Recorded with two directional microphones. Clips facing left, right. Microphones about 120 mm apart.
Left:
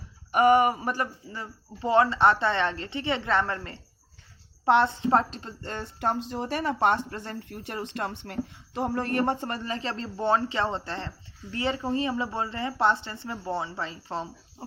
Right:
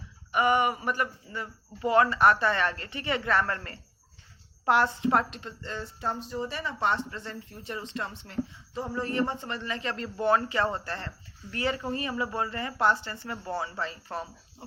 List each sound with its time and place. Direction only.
0.3 s a woman's voice: 45° left (ahead or behind)
5.6 s speech: 55° left (ahead or behind); by 14.3 s 20° left (ahead or behind)